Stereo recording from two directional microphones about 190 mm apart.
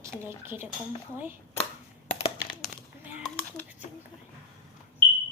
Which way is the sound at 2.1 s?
30° left (ahead or behind).